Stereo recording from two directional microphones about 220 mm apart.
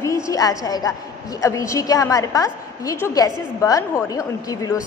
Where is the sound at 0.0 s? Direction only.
15° left (ahead or behind).